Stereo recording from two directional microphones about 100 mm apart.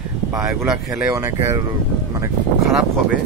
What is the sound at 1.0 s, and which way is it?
Speech, 25° right (ahead or behind).